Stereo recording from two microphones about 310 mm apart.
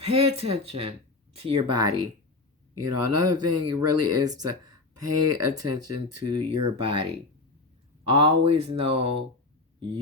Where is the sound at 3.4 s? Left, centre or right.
Right.